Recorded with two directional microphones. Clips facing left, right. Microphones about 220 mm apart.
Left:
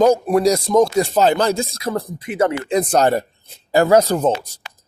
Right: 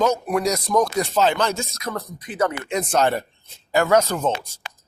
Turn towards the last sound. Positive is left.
turn(degrees=35)  # may be behind; listen again after turning